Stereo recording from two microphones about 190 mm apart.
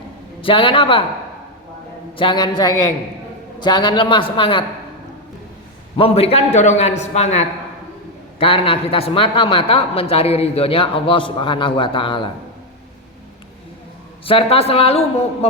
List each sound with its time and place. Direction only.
0.4 s a man's voice: 25° left (ahead or behind)
2.1 s a man's voice: 25° left (ahead or behind)
6.0 s a man's voice: 30° left (ahead or behind)
14.3 s a man's voice: 30° left (ahead or behind)